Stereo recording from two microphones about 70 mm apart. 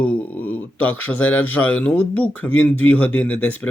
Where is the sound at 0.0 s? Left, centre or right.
Left.